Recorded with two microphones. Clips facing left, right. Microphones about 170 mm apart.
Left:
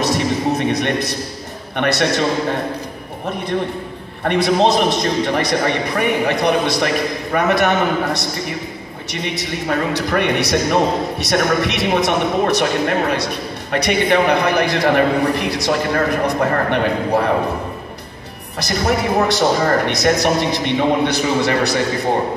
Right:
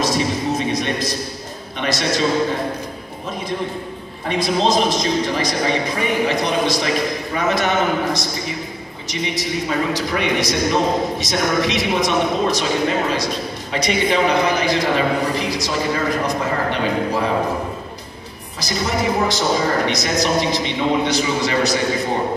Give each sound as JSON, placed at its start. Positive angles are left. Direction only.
{"t": 0.0, "sound": "a sound", "side_deg": 65}
{"t": 1.8, "sound": "a woman's voice", "side_deg": 65}
{"t": 4.2, "sound": "a woman's voice", "side_deg": 65}
{"t": 18.6, "sound": "a woman's voice", "side_deg": 65}